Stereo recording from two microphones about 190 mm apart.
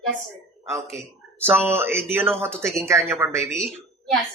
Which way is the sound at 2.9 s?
15° right (ahead or behind).